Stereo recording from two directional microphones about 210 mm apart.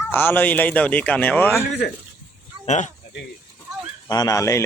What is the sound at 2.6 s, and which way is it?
Speech, 35° left (ahead or behind).